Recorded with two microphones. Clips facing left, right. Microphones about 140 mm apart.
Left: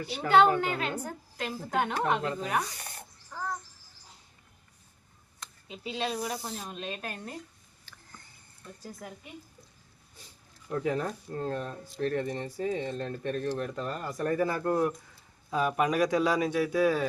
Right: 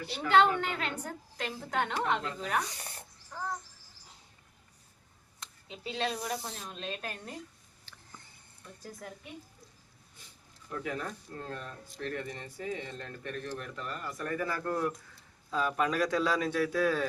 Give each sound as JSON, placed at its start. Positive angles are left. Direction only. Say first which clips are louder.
{"t": 0.6, "sound": "speech", "louder": "left 4 dB", "side_deg": 5}
{"t": 5.6, "sound": "speech", "louder": "left 1 dB", "side_deg": 10}
{"t": 7.9, "sound": "a sound", "louder": "left 1 dB", "side_deg": -25}
{"t": 8.8, "sound": "speech", "louder": "left 1 dB", "side_deg": 5}
{"t": 10.7, "sound": "speech", "louder": "left 7 dB", "side_deg": 35}